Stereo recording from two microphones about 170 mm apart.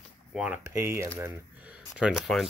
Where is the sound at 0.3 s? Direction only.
10° right (ahead or behind).